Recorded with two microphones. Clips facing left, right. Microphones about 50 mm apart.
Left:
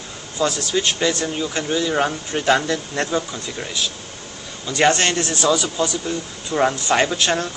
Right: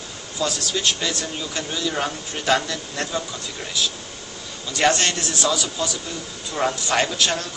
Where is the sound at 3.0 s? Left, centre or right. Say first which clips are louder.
Left 2 dB; left.